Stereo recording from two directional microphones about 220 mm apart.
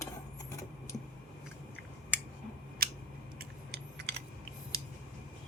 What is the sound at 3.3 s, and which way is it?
Typing, 50° right (ahead or behind).